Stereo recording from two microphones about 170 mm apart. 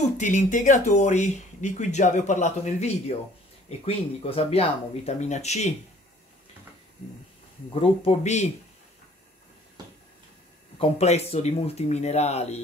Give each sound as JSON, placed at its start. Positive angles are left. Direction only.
{"t": 0.2, "sound": "speech", "side_deg": 45}
{"t": 7.7, "sound": "speech", "side_deg": 35}
{"t": 10.8, "sound": "speech", "side_deg": 40}